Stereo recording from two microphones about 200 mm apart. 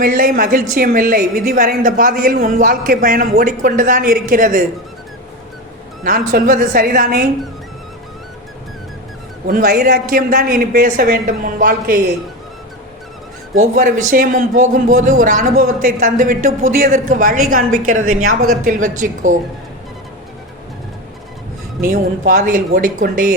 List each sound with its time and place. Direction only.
0.0 s a woman's voice: 40° right (ahead or behind)
6.1 s a woman's voice: 45° right (ahead or behind)
9.5 s a woman's voice: 50° right (ahead or behind)
13.6 s a woman's voice: 45° right (ahead or behind)
21.8 s a woman's voice: 45° right (ahead or behind)